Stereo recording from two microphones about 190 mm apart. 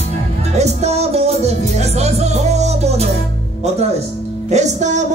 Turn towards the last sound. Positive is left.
turn(degrees=-40)  # may be behind; listen again after turning